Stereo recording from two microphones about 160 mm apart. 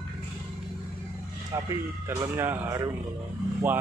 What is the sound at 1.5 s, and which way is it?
Speech, 20° right (ahead or behind).